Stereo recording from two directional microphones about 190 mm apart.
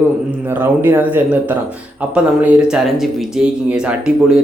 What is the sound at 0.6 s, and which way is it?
Speech, 10° right (ahead or behind).